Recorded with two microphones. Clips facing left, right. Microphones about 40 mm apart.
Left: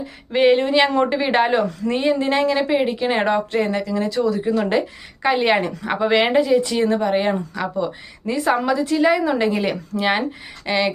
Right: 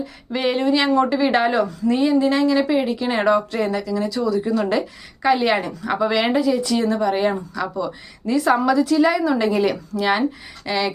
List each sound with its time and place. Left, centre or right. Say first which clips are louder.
0.3 s a woman's voice: left 6 dB; left
0.6 s a woman's voice: even; left
4.4 s a woman's voice: left 1 dB; left